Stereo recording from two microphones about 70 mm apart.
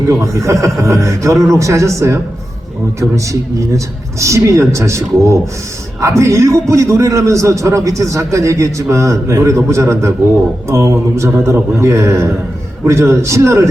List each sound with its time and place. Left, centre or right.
0.1 s a man's voice: right